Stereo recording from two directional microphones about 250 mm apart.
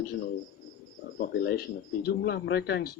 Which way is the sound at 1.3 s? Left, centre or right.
Left.